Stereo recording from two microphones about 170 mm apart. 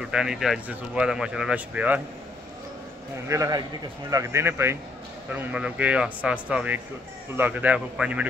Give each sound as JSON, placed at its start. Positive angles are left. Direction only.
{"t": 0.0, "sound": "speech", "side_deg": -5}
{"t": 3.3, "sound": "a man's voice", "side_deg": -20}